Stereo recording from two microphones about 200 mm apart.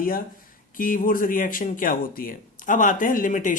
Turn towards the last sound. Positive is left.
turn(degrees=40)  # may be behind; listen again after turning